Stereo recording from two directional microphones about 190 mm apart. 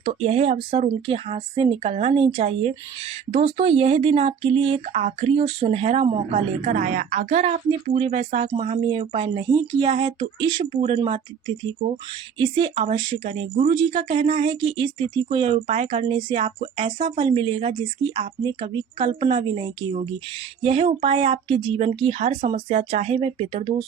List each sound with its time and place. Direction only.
0.0 s speech: 35° right (ahead or behind)
12.4 s speech: 25° right (ahead or behind)